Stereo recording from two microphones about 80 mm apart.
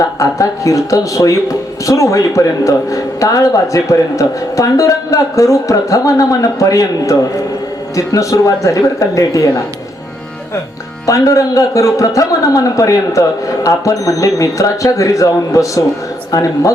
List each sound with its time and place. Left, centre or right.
0.0 s speech: left
11.0 s speech: left